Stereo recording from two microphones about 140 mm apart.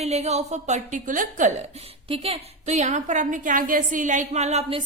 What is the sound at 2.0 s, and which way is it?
Speech, 45° right (ahead or behind).